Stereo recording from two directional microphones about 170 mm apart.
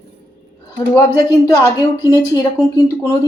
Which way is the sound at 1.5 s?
20° left (ahead or behind).